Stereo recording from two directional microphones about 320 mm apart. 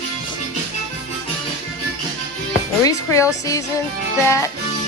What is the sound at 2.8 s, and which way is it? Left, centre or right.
Speech, centre.